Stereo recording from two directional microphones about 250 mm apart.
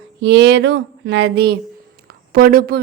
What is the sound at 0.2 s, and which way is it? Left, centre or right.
A woman's voice, right.